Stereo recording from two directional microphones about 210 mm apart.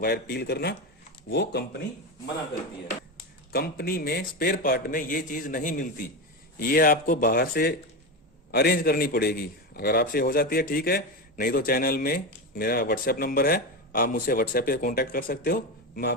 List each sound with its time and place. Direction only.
0.0 s a man's voice: 50° left (ahead or behind)
3.5 s a man's voice: 45° left (ahead or behind)